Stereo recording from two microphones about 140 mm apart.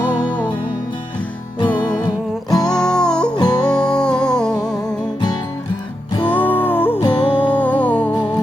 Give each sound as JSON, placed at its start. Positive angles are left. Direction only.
{"t": 2.6, "sound": "music", "side_deg": 5}
{"t": 3.3, "sound": "music", "side_deg": 30}
{"t": 3.6, "sound": "music", "side_deg": 5}
{"t": 6.3, "sound": "music", "side_deg": 15}
{"t": 7.0, "sound": "music", "side_deg": 40}
{"t": 7.6, "sound": "music", "side_deg": 10}